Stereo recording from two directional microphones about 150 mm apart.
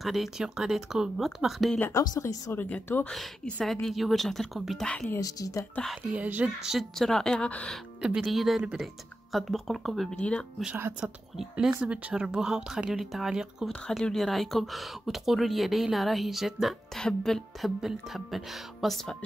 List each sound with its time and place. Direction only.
0.0 s speech: centre (ahead or behind)
1.8 s speech: 20° left (ahead or behind); by 5.0 s 5° left (ahead or behind)
5.0 s speech: 20° left (ahead or behind)
6.1 s speech: 10° right (ahead or behind); by 10.4 s 10° left (ahead or behind)
10.6 s speech: 10° right (ahead or behind)